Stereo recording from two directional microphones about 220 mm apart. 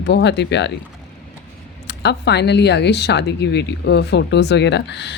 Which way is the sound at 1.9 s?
50° left (ahead or behind).